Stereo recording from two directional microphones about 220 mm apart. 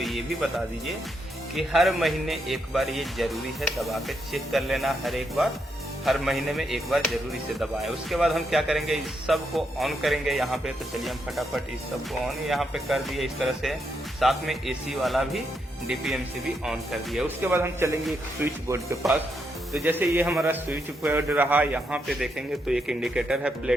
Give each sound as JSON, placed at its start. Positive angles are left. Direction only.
{"t": 0.0, "sound": "speech", "side_deg": 0}